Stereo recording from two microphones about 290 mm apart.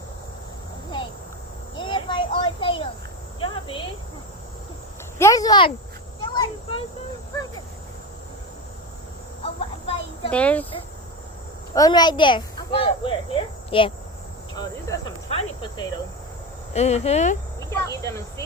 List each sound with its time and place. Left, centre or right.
1.7 s a sound: centre
3.4 s cricket: centre
5.1 s speech: centre
6.2 s insect: centre
9.4 s a sound: centre
10.3 s speech: centre
11.7 s speech: centre
14.5 s cricket: centre
17.6 s speech: centre